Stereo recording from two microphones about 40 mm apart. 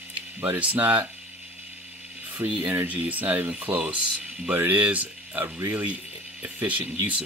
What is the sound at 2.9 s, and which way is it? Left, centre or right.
Speech, right.